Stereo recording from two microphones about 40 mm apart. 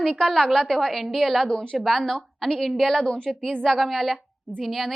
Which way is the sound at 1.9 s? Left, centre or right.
Centre.